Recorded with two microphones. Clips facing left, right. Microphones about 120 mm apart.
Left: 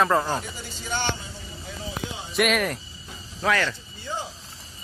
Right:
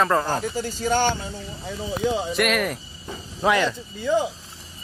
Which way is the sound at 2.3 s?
Centre (ahead or behind).